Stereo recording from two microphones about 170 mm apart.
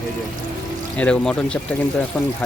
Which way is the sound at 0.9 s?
5° left (ahead or behind).